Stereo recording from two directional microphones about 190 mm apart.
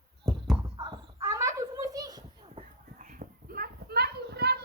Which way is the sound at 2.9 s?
45° right (ahead or behind).